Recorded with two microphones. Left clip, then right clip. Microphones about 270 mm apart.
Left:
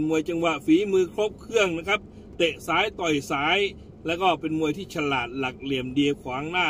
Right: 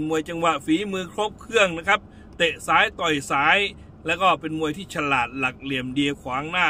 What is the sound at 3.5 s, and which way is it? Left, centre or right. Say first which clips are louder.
A man's voice: right 2 dB; centre.